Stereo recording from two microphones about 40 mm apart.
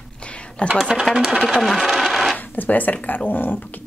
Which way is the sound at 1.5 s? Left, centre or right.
Centre.